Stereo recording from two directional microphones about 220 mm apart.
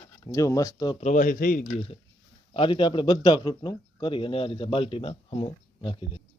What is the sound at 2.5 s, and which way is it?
A man's voice, 20° left (ahead or behind).